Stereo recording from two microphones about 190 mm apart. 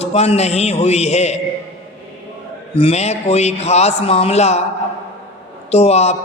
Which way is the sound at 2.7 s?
35° left (ahead or behind).